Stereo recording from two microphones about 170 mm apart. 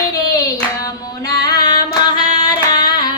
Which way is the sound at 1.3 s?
20° left (ahead or behind).